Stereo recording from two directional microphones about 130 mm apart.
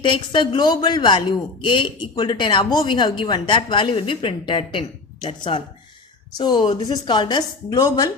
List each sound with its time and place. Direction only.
0.0 s a woman's voice: 40° left (ahead or behind)